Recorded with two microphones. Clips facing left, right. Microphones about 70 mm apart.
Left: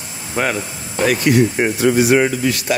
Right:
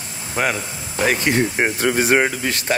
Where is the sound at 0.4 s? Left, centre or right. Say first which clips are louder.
Left 1 dB; centre.